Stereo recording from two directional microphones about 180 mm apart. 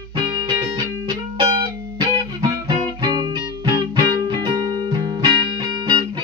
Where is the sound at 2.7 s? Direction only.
25° right (ahead or behind).